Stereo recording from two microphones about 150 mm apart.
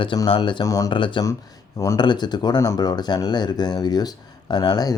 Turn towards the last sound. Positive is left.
turn(degrees=25)  # may be behind; listen again after turning